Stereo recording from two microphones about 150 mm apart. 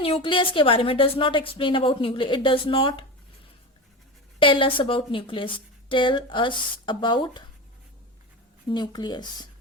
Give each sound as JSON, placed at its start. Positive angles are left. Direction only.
{"t": 0.0, "sound": "a woman's voice", "side_deg": 35}
{"t": 4.4, "sound": "a woman's voice", "side_deg": 35}
{"t": 8.7, "sound": "speech", "side_deg": 30}